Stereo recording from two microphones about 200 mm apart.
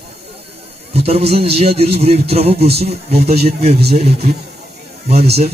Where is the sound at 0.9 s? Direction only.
30° right (ahead or behind).